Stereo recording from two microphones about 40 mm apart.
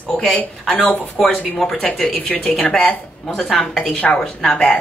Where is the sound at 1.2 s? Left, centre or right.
Centre.